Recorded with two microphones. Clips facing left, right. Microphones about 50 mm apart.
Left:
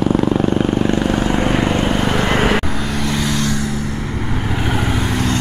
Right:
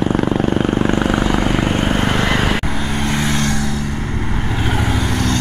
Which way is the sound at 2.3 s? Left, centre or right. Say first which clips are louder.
Left 2 dB; left.